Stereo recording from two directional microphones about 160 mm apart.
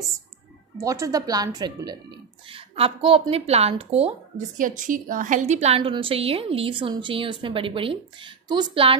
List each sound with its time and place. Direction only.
0.7 s speech: 20° right (ahead or behind); by 4.1 s 40° right (ahead or behind)
4.6 s a woman's voice: 55° right (ahead or behind); by 8.9 s 30° right (ahead or behind)